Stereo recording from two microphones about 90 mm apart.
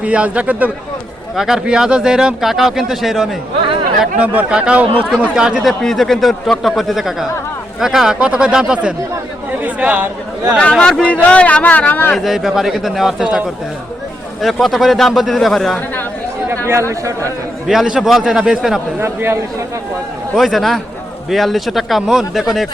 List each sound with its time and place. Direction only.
0.0 s speech: 15° right (ahead or behind)
5.8 s speech: 5° left (ahead or behind); by 10.1 s 15° right (ahead or behind)
10.6 s speech: 10° left (ahead or behind)
12.1 s speech: centre (ahead or behind)
14.4 s speech: centre (ahead or behind)
17.7 s speech: 5° right (ahead or behind)
18.9 s a man's voice: 25° right (ahead or behind)
20.3 s speech: centre (ahead or behind)